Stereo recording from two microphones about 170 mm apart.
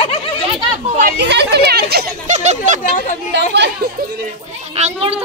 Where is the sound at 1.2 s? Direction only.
85° right; by 2.1 s 70° right (ahead or behind).